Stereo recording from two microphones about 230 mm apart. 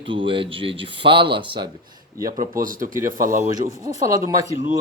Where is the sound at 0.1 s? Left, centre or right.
Right.